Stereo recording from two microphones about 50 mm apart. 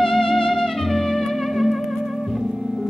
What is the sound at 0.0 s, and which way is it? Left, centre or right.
Music, centre.